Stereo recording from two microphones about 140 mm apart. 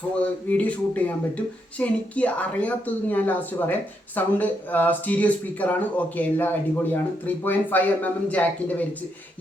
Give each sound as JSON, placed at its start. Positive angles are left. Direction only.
{"t": 0.2, "sound": "a woman's voice", "side_deg": 10}